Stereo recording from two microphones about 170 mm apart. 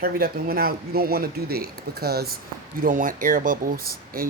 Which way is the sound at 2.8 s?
50° right (ahead or behind).